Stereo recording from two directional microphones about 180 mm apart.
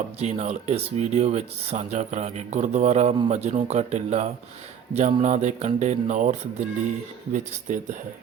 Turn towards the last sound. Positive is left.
turn(degrees=-40)  # may be behind; listen again after turning